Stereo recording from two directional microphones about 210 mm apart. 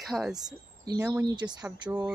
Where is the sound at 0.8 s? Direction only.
15° right (ahead or behind).